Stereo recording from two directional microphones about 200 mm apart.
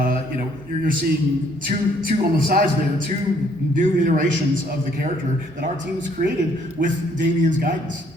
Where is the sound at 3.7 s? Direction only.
40° right (ahead or behind).